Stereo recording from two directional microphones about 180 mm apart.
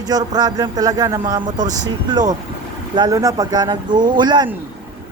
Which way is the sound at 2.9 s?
20° right (ahead or behind).